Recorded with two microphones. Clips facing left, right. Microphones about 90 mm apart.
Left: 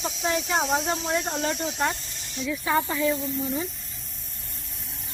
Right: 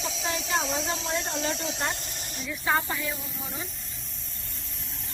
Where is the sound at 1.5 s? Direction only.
90° right.